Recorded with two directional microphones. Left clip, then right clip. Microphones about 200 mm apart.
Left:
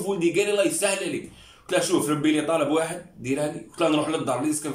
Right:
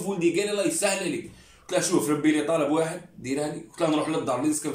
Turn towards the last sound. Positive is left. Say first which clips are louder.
# even
turn(degrees=0)  # may be behind; listen again after turning